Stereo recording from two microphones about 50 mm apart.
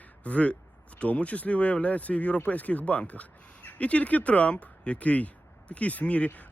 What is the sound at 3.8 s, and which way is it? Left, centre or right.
Speech, left.